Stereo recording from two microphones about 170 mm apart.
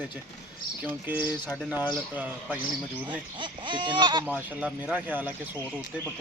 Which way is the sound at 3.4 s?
30° right (ahead or behind).